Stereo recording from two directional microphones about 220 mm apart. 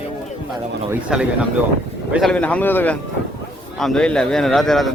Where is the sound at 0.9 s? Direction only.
5° right (ahead or behind).